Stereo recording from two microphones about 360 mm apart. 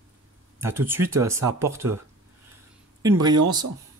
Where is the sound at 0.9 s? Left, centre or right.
Centre.